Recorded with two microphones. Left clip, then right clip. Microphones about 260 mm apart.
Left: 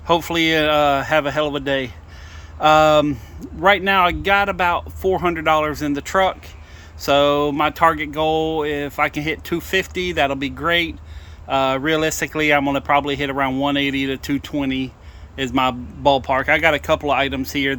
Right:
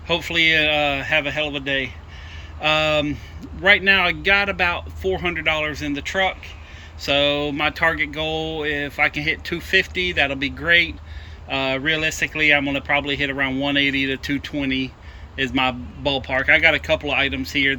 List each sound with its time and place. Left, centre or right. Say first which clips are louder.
0.1 s speech: left 1 dB; centre